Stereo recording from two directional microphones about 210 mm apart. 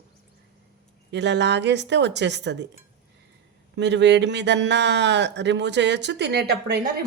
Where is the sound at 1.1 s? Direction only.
55° right (ahead or behind).